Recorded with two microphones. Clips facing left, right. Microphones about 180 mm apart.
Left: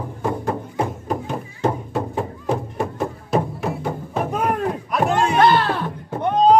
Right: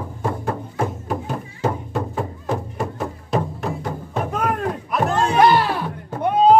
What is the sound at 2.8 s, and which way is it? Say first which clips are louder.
Music: left 2 dB; centre (ahead or behind).